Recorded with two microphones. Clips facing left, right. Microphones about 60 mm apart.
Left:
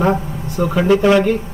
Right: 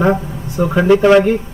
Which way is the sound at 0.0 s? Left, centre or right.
Centre.